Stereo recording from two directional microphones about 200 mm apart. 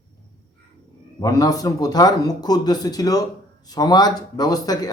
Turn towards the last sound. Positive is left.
turn(degrees=20)  # may be behind; listen again after turning